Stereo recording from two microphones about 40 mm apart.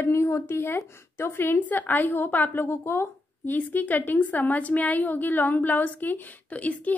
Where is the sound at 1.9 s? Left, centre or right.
Left.